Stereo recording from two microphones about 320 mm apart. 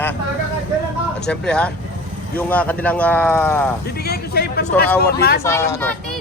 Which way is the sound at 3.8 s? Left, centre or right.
Left.